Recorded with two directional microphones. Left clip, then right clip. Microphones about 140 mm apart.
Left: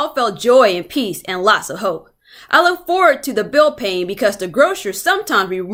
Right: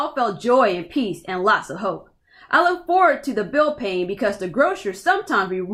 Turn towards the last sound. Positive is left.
turn(degrees=20)  # may be behind; listen again after turning